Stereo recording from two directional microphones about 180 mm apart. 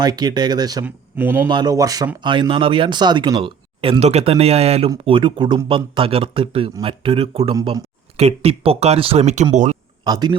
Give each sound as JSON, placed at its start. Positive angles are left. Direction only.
{"t": 0.0, "sound": "speech", "side_deg": -25}
{"t": 0.9, "sound": "speech", "side_deg": -10}
{"t": 1.5, "sound": "speech", "side_deg": -25}
{"t": 10.0, "sound": "a man's voice", "side_deg": -25}